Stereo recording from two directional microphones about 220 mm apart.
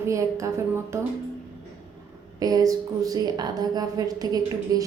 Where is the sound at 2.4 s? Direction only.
15° right (ahead or behind).